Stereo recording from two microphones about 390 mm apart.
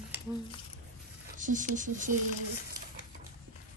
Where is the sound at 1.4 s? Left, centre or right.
Centre.